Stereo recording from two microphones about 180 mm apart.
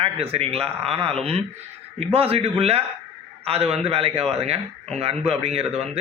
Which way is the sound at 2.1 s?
30° right (ahead or behind).